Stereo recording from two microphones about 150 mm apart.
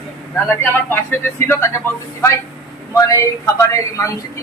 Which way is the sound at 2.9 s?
20° left (ahead or behind).